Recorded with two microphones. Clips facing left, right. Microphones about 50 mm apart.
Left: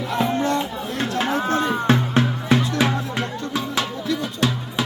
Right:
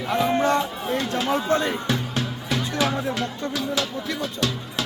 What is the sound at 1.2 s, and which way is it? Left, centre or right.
Run, left.